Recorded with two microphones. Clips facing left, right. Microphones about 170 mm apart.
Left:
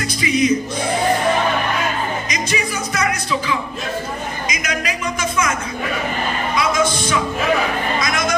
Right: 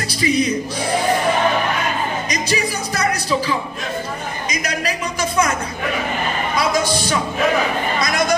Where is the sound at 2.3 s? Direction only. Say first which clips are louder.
Right 1 dB; 35° right (ahead or behind).